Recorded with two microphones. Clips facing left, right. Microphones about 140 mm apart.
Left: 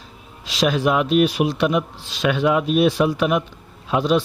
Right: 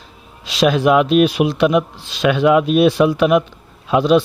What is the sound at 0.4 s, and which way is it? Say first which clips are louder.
Speech: right 5 dB; 70° right (ahead or behind).